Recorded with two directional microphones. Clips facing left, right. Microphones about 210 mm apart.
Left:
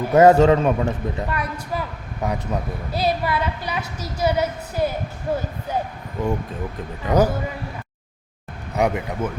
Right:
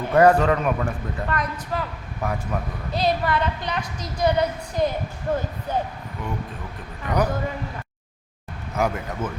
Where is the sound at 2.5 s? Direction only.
25° left (ahead or behind).